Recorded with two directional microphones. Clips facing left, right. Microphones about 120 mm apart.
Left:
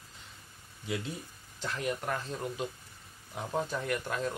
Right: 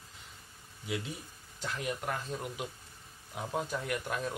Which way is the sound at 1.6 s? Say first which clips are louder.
Left 2 dB; 10° right (ahead or behind).